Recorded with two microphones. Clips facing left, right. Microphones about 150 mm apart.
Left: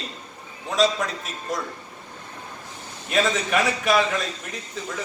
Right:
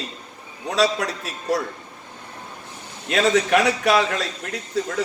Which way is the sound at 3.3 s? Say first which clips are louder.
Right 5 dB; 75° right (ahead or behind).